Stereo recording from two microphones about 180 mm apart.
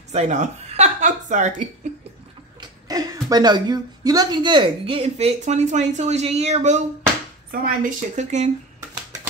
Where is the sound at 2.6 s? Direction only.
20° right (ahead or behind); by 8.4 s 40° right (ahead or behind).